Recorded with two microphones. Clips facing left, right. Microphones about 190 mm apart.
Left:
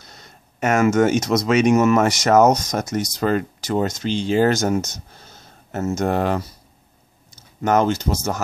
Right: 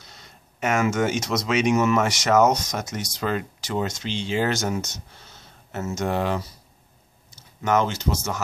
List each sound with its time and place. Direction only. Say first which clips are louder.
0.0 s speech: left 3 dB; 45° left (ahead or behind)